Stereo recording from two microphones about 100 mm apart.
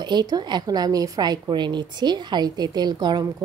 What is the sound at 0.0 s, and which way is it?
A woman's voice, 45° right (ahead or behind).